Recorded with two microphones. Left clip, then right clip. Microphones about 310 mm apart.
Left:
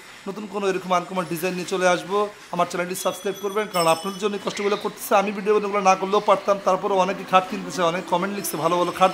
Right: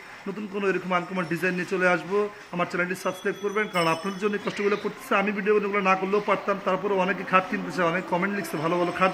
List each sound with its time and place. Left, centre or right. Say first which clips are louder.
0.6 s speech: left 3 dB; centre